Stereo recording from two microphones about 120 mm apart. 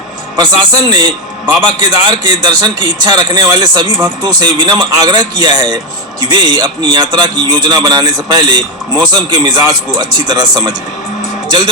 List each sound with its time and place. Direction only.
0.3 s speech: 35° right (ahead or behind)